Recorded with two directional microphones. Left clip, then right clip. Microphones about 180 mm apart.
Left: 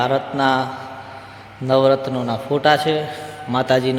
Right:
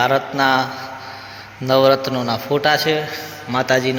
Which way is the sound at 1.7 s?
Centre (ahead or behind).